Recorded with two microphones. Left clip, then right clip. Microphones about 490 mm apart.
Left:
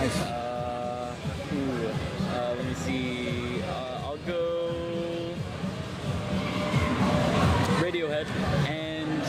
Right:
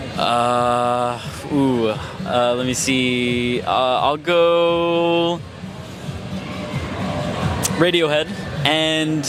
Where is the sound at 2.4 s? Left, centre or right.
Right.